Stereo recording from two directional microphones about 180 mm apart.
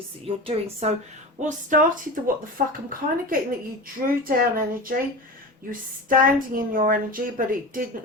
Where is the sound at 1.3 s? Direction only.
45° right (ahead or behind).